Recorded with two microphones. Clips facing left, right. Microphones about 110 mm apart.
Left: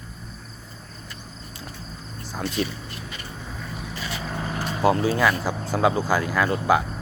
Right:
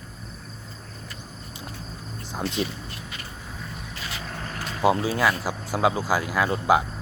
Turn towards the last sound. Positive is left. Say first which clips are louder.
# even
turn(degrees=-15)  # may be behind; listen again after turning